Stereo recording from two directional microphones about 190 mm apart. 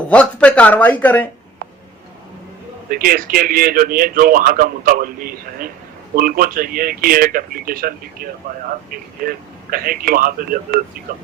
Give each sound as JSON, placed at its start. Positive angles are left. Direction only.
{"t": 0.1, "sound": "speech", "side_deg": 5}
{"t": 2.9, "sound": "a man's voice", "side_deg": -50}